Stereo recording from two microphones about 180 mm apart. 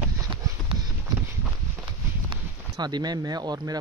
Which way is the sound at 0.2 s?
25° right (ahead or behind).